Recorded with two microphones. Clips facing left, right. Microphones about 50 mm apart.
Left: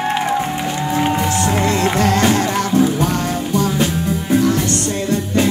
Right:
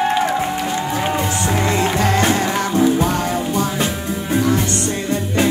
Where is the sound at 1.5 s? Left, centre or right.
Centre.